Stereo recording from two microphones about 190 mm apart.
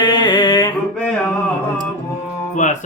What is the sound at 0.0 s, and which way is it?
Mantra, 20° left (ahead or behind).